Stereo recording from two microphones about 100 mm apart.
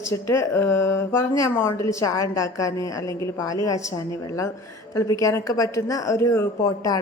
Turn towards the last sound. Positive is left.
turn(degrees=35)  # may be behind; listen again after turning